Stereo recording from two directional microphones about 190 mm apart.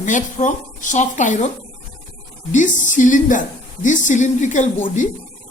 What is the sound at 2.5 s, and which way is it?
A woman's voice, 40° left (ahead or behind).